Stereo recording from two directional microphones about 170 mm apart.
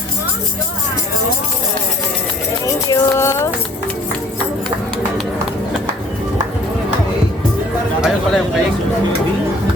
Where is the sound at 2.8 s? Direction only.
15° left (ahead or behind).